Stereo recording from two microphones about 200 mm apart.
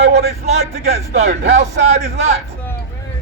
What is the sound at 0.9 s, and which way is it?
A man's voice, 35° right (ahead or behind).